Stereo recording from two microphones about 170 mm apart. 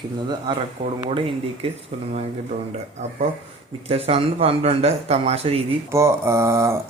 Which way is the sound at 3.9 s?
35° right (ahead or behind).